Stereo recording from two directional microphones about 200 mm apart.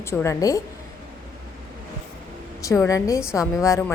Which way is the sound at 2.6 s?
15° left (ahead or behind).